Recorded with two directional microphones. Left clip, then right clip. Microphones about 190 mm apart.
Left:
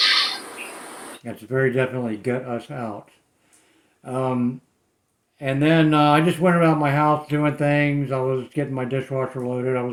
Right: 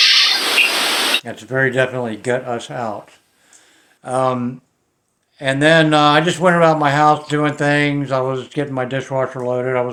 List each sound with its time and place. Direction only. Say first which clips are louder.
0.0 s a sound: right 7 dB; 30° right (ahead or behind)
1.3 s speech: right 4 dB; 5° left (ahead or behind)
4.0 s speech: right 8 dB; centre (ahead or behind)
5.4 s speech: right 7 dB; centre (ahead or behind)
6.6 s speech: right 6 dB; 40° right (ahead or behind)
7.2 s speech: right 4 dB; 5° left (ahead or behind)
9.2 s speech: right 7 dB; 45° right (ahead or behind)
9.6 s speech: right 5 dB; 5° left (ahead or behind)